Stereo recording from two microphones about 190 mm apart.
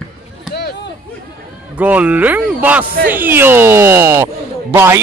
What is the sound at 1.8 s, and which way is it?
Speech, 10° right (ahead or behind).